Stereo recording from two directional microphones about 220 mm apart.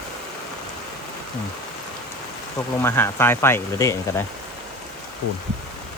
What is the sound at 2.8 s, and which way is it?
Speech, 10° left (ahead or behind).